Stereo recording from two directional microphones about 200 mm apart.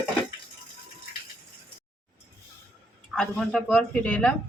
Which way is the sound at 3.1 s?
Centre (ahead or behind).